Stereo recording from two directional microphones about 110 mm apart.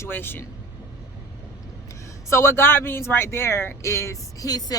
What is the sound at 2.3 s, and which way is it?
A woman's voice, 25° left (ahead or behind).